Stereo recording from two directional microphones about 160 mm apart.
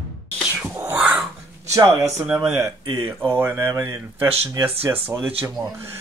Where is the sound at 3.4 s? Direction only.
15° right (ahead or behind).